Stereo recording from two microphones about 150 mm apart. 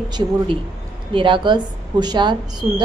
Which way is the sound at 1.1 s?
35° right (ahead or behind).